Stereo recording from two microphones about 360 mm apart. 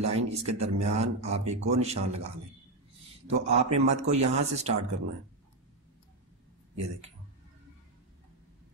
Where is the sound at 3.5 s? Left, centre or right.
Centre.